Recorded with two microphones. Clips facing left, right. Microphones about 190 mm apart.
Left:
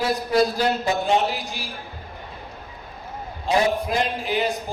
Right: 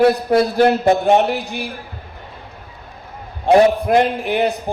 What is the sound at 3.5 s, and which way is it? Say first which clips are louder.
A man's voice: right 9 dB; 60° right (ahead or behind).